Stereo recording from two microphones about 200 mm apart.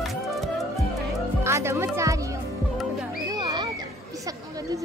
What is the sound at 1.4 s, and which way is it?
Speech, 15° right (ahead or behind).